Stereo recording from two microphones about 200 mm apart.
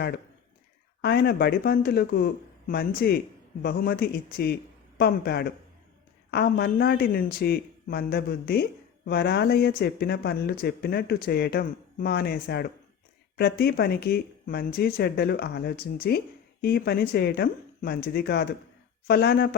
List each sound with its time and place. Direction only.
1.0 s speech: 55° left (ahead or behind)